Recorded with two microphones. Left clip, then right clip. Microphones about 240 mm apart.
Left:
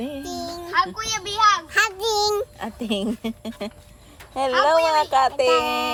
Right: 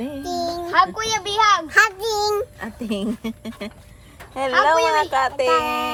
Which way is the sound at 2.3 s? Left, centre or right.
Centre.